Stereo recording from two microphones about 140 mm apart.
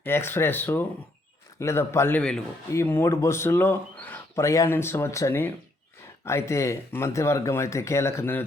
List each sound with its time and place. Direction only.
0.0 s speech: 15° left (ahead or behind)